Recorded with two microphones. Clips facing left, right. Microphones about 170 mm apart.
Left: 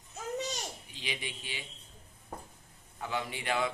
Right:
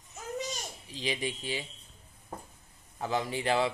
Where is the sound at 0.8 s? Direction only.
35° right (ahead or behind).